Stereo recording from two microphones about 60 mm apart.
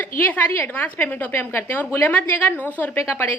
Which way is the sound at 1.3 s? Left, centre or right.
Left.